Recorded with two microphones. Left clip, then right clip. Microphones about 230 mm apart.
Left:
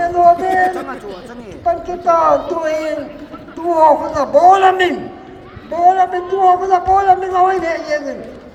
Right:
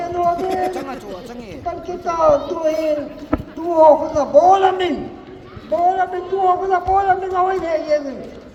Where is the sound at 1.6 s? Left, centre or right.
Left.